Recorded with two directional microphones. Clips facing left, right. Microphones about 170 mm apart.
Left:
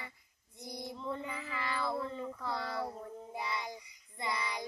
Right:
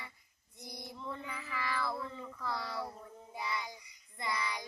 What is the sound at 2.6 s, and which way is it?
Speech, 50° left (ahead or behind).